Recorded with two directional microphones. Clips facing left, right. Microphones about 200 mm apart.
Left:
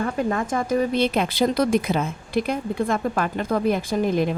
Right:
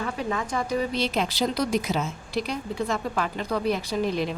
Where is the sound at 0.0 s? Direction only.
50° left (ahead or behind).